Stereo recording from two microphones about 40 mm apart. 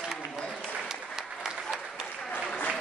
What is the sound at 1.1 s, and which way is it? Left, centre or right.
Applause, centre.